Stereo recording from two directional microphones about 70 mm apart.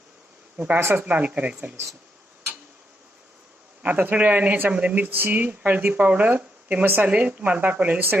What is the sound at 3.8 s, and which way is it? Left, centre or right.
Speech, right.